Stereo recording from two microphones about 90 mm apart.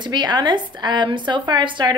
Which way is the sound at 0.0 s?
55° right (ahead or behind).